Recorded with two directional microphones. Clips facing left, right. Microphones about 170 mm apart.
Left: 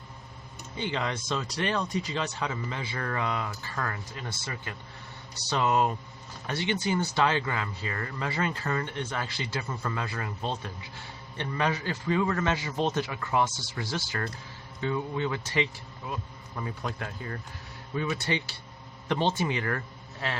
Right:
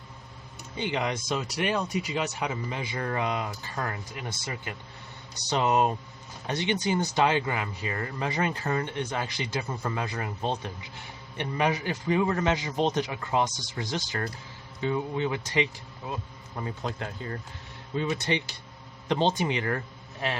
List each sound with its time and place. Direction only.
0.8 s a man's voice: 15° right (ahead or behind)